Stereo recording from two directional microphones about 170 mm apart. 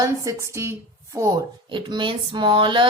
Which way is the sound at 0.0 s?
20° right (ahead or behind).